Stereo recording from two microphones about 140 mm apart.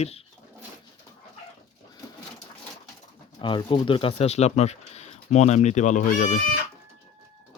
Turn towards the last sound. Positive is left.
turn(degrees=60)  # may be behind; listen again after turning